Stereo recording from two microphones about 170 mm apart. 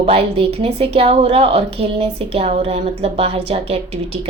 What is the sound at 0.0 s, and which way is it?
A woman's voice, 35° right (ahead or behind).